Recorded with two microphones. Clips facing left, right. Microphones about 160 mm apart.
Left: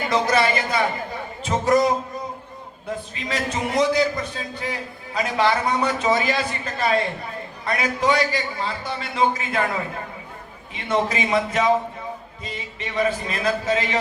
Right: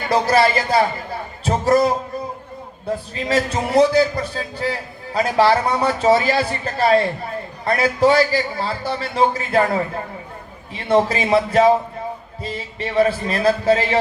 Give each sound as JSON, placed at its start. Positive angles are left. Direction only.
{"t": 0.1, "sound": "a man's voice", "side_deg": -30}
{"t": 3.2, "sound": "a man's voice", "side_deg": -40}
{"t": 10.8, "sound": "a man's voice", "side_deg": -35}